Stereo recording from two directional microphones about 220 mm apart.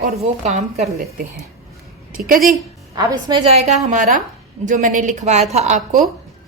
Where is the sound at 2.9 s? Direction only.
20° right (ahead or behind).